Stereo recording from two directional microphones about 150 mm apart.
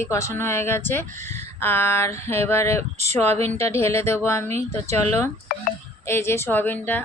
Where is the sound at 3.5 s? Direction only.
15° left (ahead or behind).